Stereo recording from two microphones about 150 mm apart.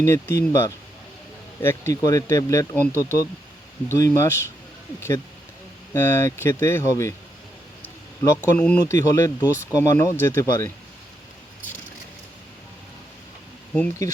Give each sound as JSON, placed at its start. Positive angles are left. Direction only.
{"t": 0.0, "sound": "speech", "side_deg": 15}
{"t": 1.6, "sound": "speech", "side_deg": 20}
{"t": 8.4, "sound": "speech", "side_deg": 10}
{"t": 9.0, "sound": "speech", "side_deg": 20}
{"t": 13.7, "sound": "speech", "side_deg": 10}